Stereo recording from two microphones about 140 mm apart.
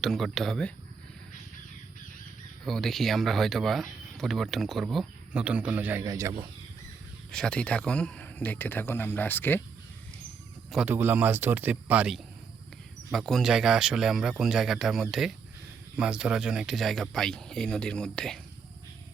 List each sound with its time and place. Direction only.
0.0 s speech: centre (ahead or behind)
2.6 s speech: centre (ahead or behind); by 6.3 s 20° right (ahead or behind)
7.3 s speech: 5° left (ahead or behind)
10.8 s speech: 15° right (ahead or behind); by 18.3 s 5° left (ahead or behind)